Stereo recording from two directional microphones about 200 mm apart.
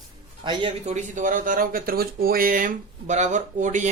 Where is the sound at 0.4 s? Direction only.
25° right (ahead or behind).